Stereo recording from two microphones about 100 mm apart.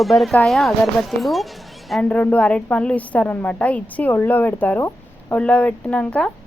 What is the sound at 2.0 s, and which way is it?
Speech, 15° left (ahead or behind).